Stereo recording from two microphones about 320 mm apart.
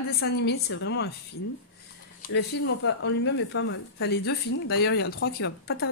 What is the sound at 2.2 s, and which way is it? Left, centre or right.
Speech, left.